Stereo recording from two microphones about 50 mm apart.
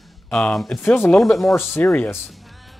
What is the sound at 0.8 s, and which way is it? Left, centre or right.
Speech, left.